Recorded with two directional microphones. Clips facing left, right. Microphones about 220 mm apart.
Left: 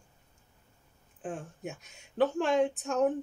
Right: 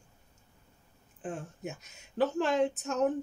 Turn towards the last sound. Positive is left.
turn(degrees=0)  # may be behind; listen again after turning